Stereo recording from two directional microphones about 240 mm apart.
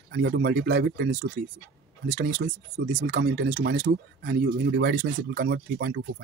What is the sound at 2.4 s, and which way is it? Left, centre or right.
Speech, right.